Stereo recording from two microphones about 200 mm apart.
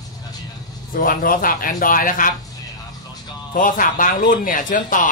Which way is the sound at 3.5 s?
40° left (ahead or behind).